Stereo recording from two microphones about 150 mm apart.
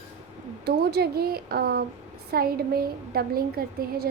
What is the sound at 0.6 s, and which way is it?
A woman's voice, 90° right.